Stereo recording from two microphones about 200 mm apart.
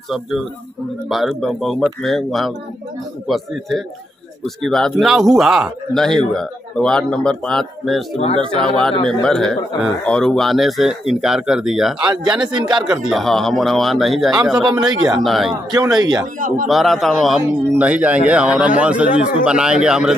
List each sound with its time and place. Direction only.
1.0 s a man's voice: centre (ahead or behind)
12.5 s a man's voice: 20° right (ahead or behind)
13.1 s a man's voice: centre (ahead or behind)
14.7 s a man's voice: 20° right (ahead or behind)
15.2 s a man's voice: centre (ahead or behind)
15.7 s a man's voice: 20° right (ahead or behind)
16.3 s a man's voice: 40° right (ahead or behind)
16.6 s a man's voice: centre (ahead or behind)